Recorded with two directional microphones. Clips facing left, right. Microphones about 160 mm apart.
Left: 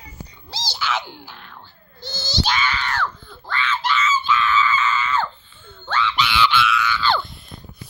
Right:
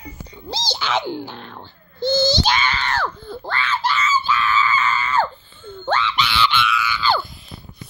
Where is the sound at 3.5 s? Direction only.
35° right (ahead or behind).